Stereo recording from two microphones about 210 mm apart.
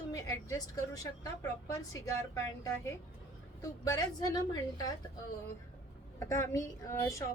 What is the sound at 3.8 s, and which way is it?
Speech, 20° left (ahead or behind).